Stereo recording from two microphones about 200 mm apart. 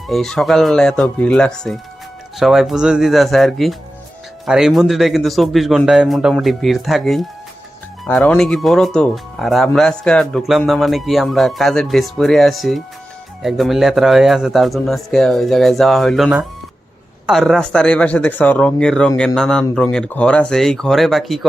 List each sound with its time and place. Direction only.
0.1 s speech: centre (ahead or behind)